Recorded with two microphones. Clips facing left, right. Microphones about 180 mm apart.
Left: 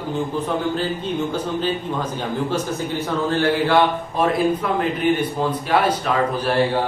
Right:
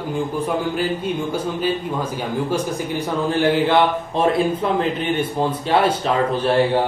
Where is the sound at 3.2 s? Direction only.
15° right (ahead or behind).